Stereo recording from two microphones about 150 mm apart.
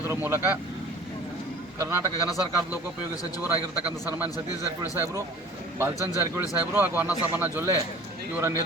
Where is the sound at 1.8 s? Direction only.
15° right (ahead or behind).